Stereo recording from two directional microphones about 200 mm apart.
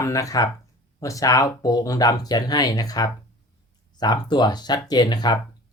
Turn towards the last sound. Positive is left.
turn(degrees=20)  # may be behind; listen again after turning